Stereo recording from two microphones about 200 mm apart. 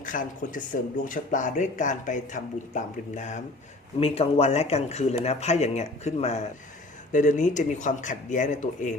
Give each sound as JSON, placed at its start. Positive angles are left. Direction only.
{"t": 0.0, "sound": "speech", "side_deg": 40}